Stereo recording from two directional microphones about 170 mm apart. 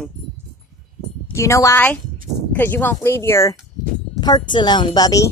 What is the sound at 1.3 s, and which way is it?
Speech, 15° left (ahead or behind).